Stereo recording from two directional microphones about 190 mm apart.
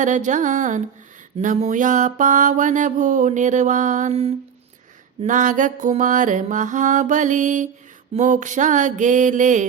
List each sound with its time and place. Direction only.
0.0 s mantra: 40° right (ahead or behind)